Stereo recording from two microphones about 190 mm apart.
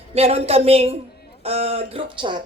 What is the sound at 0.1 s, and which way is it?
A woman's voice, 30° right (ahead or behind).